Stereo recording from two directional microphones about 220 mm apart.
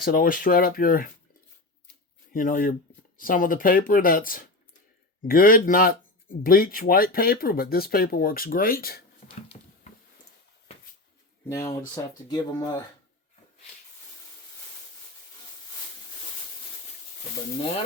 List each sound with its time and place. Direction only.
0.0 s speech: 40° left (ahead or behind)
2.3 s speech: 40° left (ahead or behind)
11.4 s speech: 10° left (ahead or behind)